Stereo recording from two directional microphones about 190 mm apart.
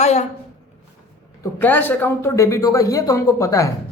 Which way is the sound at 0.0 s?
35° left (ahead or behind).